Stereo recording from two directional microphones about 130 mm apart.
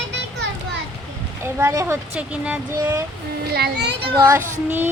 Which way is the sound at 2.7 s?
20° right (ahead or behind).